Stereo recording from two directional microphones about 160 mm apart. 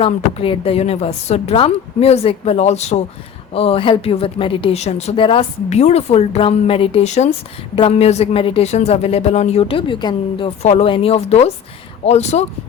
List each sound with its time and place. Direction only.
0.0 s speech: 35° left (ahead or behind)
10.6 s speech: 40° left (ahead or behind)